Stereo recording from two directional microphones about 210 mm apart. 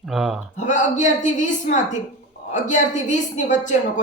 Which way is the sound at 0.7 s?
35° left (ahead or behind).